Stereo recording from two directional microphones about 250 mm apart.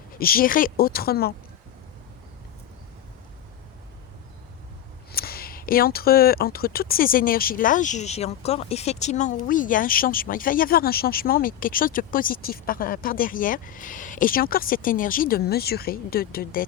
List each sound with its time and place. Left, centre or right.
0.1 s speech: left
5.1 s speech: left